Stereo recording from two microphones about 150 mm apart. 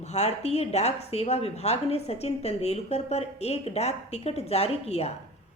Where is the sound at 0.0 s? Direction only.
45° left (ahead or behind).